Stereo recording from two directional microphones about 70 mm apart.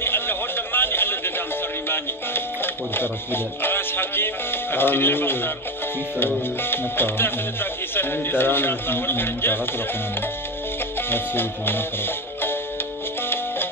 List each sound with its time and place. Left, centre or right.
0.0 s a sound: left
1.9 s a man's voice: left
11.0 s music: left